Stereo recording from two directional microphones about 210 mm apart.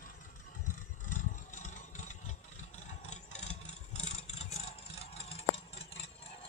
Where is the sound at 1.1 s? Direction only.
35° left (ahead or behind).